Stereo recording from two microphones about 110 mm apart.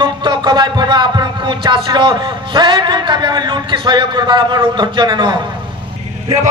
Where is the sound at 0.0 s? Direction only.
45° right (ahead or behind).